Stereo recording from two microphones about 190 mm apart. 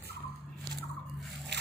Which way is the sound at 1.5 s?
60° right (ahead or behind).